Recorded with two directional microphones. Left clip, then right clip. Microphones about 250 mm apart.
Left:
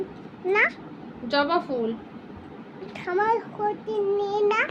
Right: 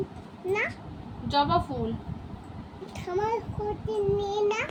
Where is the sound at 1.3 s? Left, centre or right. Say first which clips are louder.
Left 2 dB; right.